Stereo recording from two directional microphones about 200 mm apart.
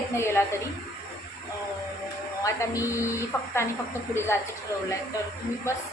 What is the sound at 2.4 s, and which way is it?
A woman's voice, 15° left (ahead or behind).